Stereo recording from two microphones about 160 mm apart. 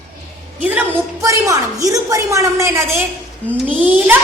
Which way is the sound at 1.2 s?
20° right (ahead or behind).